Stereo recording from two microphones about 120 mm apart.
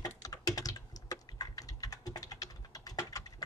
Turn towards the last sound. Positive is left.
turn(degrees=30)  # may be behind; listen again after turning